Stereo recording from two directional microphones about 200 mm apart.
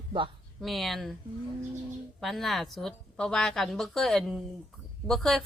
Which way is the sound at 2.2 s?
Centre (ahead or behind).